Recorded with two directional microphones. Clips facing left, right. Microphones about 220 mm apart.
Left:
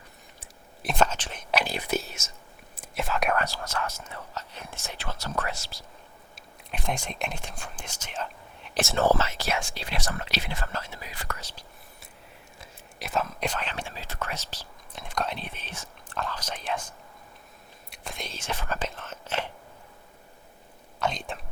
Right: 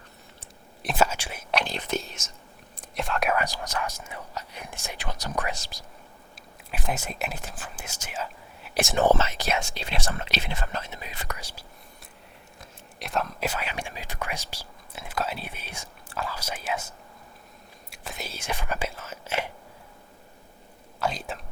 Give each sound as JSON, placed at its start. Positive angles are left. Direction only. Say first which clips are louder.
{"t": 0.8, "sound": "whispering", "louder": "right 1 dB", "side_deg": -5}
{"t": 3.3, "sound": "speech", "louder": "right 1 dB", "side_deg": -15}
{"t": 6.3, "sound": "speech", "louder": "right 1 dB", "side_deg": -5}
{"t": 11.3, "sound": "speech", "louder": "right 1 dB", "side_deg": -10}
{"t": 12.5, "sound": "speech", "louder": "even", "side_deg": 0}
{"t": 17.9, "sound": "speech", "louder": "right 1 dB", "side_deg": 0}
{"t": 21.0, "sound": "whispering", "louder": "even", "side_deg": -5}